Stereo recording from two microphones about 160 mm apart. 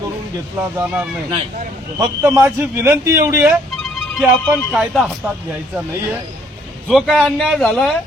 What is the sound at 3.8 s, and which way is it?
Speech, centre (ahead or behind).